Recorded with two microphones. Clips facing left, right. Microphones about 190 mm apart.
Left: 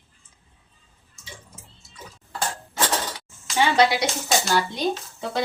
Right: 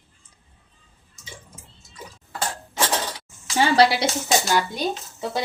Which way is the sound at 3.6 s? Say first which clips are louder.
Right 2 dB; 35° right (ahead or behind).